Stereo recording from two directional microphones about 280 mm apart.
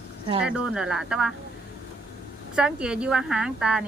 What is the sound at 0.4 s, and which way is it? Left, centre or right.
Speech, centre.